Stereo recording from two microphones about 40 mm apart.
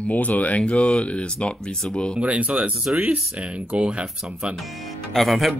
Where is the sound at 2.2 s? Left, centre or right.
Right.